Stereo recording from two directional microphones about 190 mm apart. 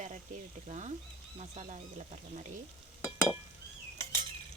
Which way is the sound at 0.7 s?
35° right (ahead or behind).